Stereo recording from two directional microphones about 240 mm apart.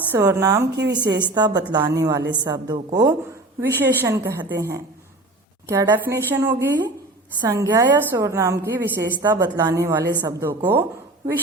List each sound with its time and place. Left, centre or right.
0.1 s a woman's voice: centre